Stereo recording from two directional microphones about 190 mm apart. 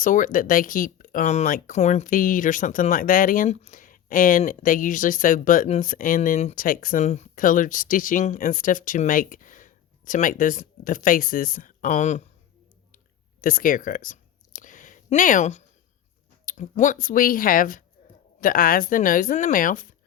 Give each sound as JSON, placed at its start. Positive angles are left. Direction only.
{"t": 0.0, "sound": "speech", "side_deg": 45}
{"t": 13.4, "sound": "a sound", "side_deg": 45}
{"t": 16.5, "sound": "speech", "side_deg": 40}